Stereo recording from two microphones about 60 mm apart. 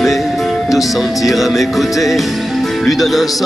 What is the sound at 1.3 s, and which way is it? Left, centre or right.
Music, centre.